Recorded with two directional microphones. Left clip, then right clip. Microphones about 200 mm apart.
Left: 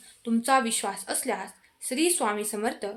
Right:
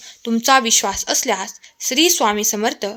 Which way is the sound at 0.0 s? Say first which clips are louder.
Right 9 dB; 45° right (ahead or behind).